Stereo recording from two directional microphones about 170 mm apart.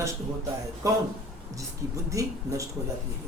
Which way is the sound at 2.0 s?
20° right (ahead or behind).